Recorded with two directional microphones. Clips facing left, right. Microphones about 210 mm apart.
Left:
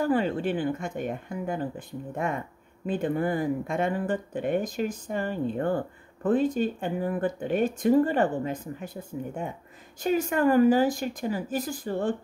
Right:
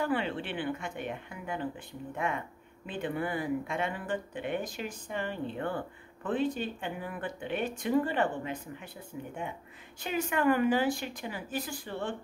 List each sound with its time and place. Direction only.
0.0 s a woman's voice: 40° left (ahead or behind)